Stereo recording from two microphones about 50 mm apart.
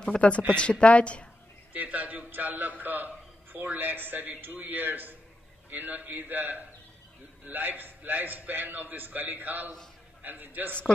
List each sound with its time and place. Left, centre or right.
0.1 s speech: centre
0.6 s speech: left
1.7 s a man's voice: right
2.8 s a sound: right
3.5 s a man's voice: right